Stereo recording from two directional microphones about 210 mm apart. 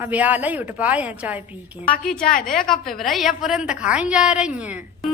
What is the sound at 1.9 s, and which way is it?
Speech, 5° left (ahead or behind).